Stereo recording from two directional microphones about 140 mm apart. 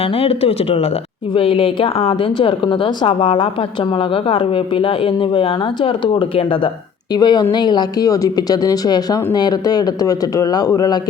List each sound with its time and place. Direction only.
0.0 s speech: 40° left (ahead or behind)